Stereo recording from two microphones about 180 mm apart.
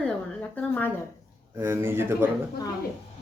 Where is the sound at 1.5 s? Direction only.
15° right (ahead or behind).